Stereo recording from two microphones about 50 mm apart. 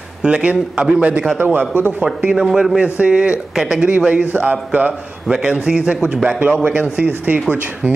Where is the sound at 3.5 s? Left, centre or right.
Centre.